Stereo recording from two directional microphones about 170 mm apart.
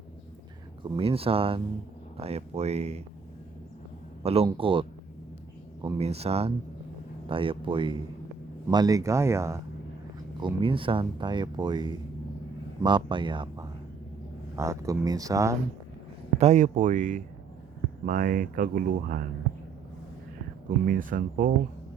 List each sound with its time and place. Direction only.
0.8 s speech: 35° right (ahead or behind)
4.2 s speech: 35° right (ahead or behind)
6.0 s speech: 35° right (ahead or behind); by 9.6 s 15° right (ahead or behind)
10.4 s speech: 30° right (ahead or behind)
14.5 s speech: 20° right (ahead or behind)
16.4 s speech: 45° right (ahead or behind)
20.8 s speech: 55° right (ahead or behind)